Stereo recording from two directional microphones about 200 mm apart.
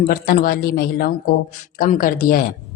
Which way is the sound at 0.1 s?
45° left (ahead or behind).